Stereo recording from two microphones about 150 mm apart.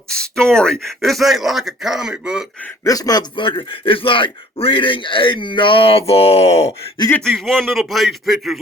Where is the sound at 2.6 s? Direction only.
20° left (ahead or behind); by 6.9 s 45° left (ahead or behind).